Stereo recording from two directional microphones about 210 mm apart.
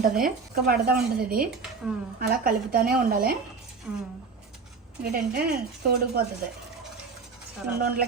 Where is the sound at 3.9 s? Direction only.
5° right (ahead or behind).